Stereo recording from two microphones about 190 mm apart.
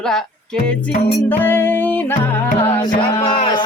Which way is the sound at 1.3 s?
10° left (ahead or behind).